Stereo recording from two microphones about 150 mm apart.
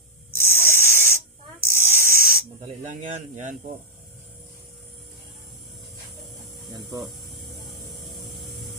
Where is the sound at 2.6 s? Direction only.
55° right (ahead or behind).